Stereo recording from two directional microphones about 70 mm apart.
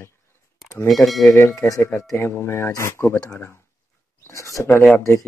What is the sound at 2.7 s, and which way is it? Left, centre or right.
Speech, left.